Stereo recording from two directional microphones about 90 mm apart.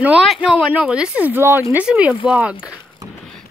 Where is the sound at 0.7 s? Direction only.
10° right (ahead or behind).